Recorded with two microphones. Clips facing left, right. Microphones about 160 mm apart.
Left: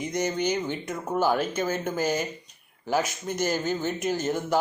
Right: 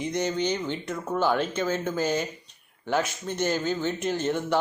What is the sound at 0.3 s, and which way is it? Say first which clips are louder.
Speech: even; 10° left (ahead or behind).